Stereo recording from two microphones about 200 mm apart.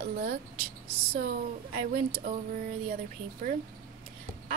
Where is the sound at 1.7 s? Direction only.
45° right (ahead or behind).